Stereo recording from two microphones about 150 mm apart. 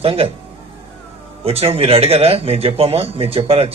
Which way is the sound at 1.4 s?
40° right (ahead or behind).